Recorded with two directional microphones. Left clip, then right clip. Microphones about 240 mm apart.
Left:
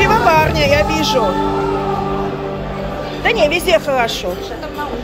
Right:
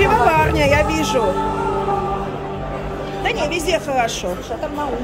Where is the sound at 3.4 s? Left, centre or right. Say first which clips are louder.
Left 9 dB; centre.